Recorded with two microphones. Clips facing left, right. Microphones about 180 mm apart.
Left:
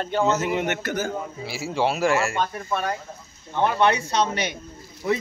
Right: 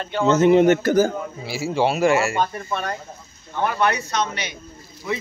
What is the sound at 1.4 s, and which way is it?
A man's voice, centre (ahead or behind).